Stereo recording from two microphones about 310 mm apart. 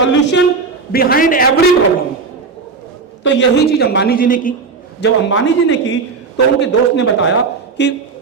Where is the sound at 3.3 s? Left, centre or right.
Left.